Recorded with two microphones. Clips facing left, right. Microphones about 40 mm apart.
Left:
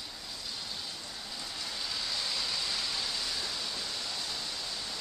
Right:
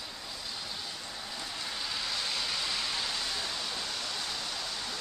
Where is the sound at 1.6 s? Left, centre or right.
Right.